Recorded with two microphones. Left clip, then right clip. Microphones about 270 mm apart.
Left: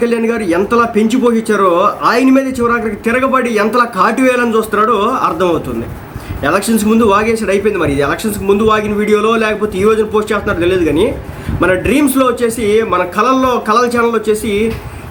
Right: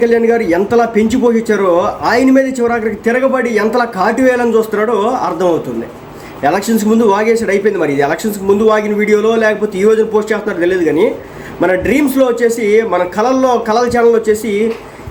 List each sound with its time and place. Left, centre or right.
0.0 s a man's voice: centre